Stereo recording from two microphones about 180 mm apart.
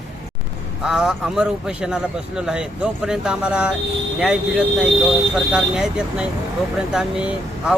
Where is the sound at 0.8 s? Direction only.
Centre (ahead or behind).